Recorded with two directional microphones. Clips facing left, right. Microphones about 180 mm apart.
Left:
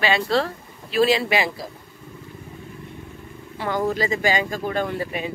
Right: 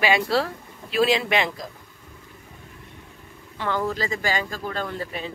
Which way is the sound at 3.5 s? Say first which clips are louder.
Left 3 dB; 15° left (ahead or behind).